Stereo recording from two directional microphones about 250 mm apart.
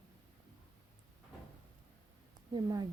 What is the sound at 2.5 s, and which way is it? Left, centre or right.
Speech, centre.